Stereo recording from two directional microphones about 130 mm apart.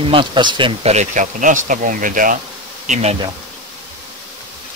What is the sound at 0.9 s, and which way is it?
Speech, 70° right (ahead or behind).